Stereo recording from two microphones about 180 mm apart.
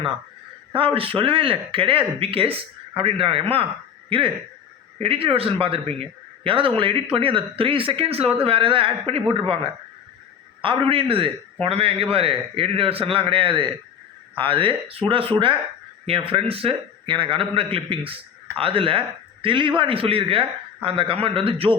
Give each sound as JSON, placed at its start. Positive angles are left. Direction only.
{"t": 0.7, "sound": "a man's voice", "side_deg": -30}
{"t": 4.9, "sound": "a man's voice", "side_deg": -30}